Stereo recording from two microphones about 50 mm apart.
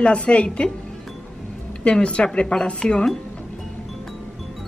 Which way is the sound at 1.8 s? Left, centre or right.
Left.